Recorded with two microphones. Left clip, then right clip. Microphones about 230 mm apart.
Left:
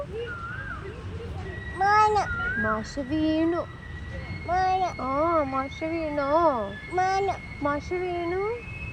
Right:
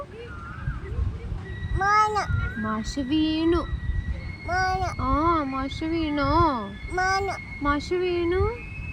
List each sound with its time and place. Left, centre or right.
1.9 s a child's voice: right
4.4 s a child's voice: right
6.4 s a child's voice: right